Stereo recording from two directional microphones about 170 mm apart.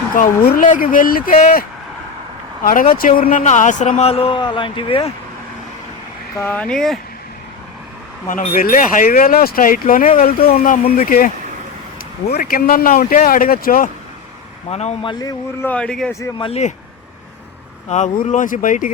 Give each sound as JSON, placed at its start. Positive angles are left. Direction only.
{"t": 0.2, "sound": "speech", "side_deg": 55}
{"t": 2.9, "sound": "a man's voice", "side_deg": 55}
{"t": 6.3, "sound": "speech", "side_deg": 10}
{"t": 8.5, "sound": "speech", "side_deg": 50}
{"t": 12.3, "sound": "speech", "side_deg": 60}
{"t": 14.7, "sound": "a man's voice", "side_deg": 40}
{"t": 15.2, "sound": "speech", "side_deg": 20}
{"t": 15.7, "sound": "speech", "side_deg": 5}
{"t": 16.4, "sound": "a man's voice", "side_deg": 40}
{"t": 17.8, "sound": "speech", "side_deg": 45}